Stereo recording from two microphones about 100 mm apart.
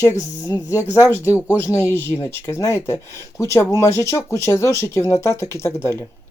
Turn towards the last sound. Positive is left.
turn(degrees=25)  # may be behind; listen again after turning